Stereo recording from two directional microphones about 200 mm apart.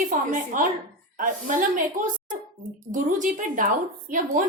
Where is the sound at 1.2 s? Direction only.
40° right (ahead or behind).